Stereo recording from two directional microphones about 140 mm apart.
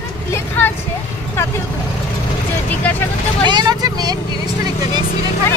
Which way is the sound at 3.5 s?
30° right (ahead or behind).